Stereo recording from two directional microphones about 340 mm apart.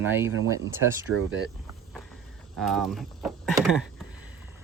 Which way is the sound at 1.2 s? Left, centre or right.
Right.